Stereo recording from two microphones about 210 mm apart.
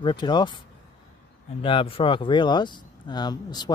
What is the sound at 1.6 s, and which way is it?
Speech, 25° left (ahead or behind).